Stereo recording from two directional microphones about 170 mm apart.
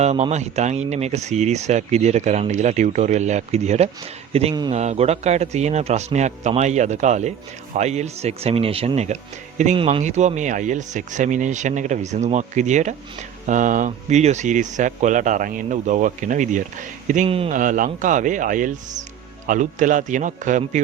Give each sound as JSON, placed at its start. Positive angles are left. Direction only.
{"t": 0.0, "sound": "a man's voice", "side_deg": -40}
{"t": 17.2, "sound": "a man's voice", "side_deg": -35}
{"t": 17.5, "sound": "speech", "side_deg": -50}